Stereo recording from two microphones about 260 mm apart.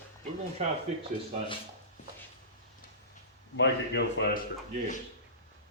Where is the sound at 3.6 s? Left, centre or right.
Left.